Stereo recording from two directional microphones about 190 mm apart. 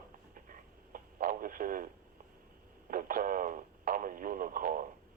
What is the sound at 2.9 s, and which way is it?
Speech, 45° right (ahead or behind).